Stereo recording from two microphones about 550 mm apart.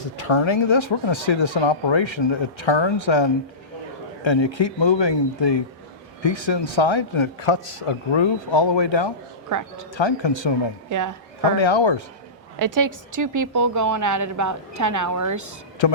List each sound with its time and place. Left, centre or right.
0.2 s a man's voice: left
9.5 s a woman's voice: right
9.9 s a man's voice: left
10.8 s a woman's voice: right
11.5 s speech: left
12.5 s a woman's voice: right
15.8 s a man's voice: left